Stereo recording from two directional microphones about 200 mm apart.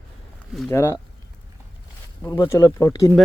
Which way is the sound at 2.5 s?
15° left (ahead or behind).